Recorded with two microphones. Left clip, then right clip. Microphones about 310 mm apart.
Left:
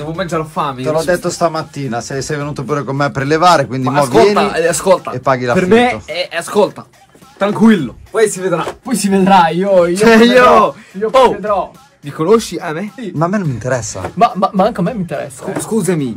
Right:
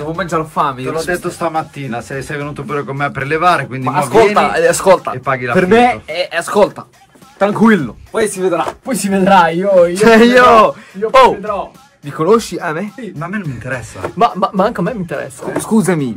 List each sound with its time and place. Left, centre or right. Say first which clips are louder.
0.0 s speech: right 1 dB; centre
8.1 s speech: left 2 dB; right
8.6 s speech: even; centre